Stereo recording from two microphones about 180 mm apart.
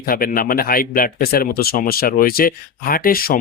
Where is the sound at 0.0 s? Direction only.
55° left (ahead or behind).